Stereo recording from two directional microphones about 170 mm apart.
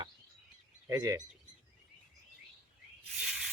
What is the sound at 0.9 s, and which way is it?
Speech, 20° right (ahead or behind).